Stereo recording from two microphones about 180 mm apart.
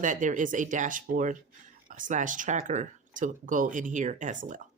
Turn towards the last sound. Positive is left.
turn(degrees=-45)  # may be behind; listen again after turning